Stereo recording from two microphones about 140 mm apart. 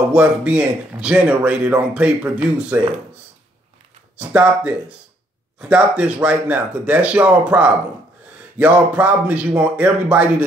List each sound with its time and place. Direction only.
0.1 s speech: 10° right (ahead or behind)
4.2 s speech: 10° right (ahead or behind)